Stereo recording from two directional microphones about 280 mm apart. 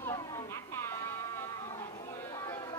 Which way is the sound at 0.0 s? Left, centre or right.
Centre.